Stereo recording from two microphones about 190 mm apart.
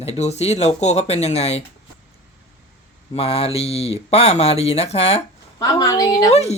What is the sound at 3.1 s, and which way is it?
Speech, 30° left (ahead or behind).